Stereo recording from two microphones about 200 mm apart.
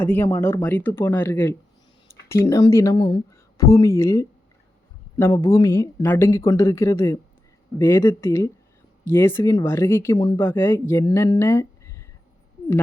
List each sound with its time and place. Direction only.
0.0 s speech: 10° left (ahead or behind)
10.2 s speech: 25° left (ahead or behind)
10.4 s speech: 10° left (ahead or behind)
11.3 s a sound: 15° left (ahead or behind)